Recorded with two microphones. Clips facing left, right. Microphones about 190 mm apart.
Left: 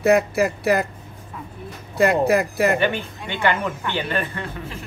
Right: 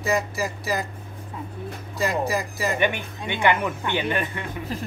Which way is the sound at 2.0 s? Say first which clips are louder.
Left 7 dB; 60° left (ahead or behind).